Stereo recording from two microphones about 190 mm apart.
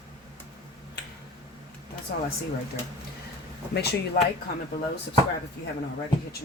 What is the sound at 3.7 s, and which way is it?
Speech, 60° left (ahead or behind).